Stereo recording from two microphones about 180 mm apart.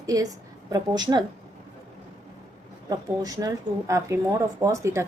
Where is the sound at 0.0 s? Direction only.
20° right (ahead or behind).